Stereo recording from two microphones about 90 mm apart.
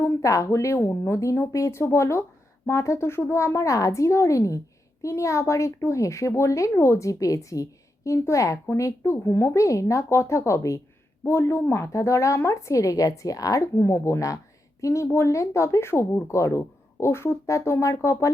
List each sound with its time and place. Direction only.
0.0 s speech: 35° left (ahead or behind)